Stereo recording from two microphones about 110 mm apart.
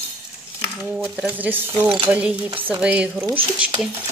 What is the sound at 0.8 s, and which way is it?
Speech, 15° right (ahead or behind).